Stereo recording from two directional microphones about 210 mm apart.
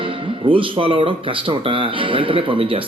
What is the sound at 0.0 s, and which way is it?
Speech, 25° right (ahead or behind).